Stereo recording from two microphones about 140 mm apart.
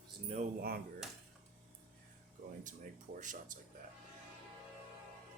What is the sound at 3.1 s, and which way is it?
Speech, 65° right (ahead or behind).